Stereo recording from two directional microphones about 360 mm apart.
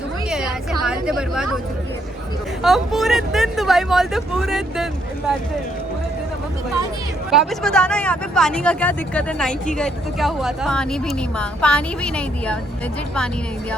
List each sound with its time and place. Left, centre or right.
0.3 s a sound: centre
2.6 s speech: centre
7.3 s speech: centre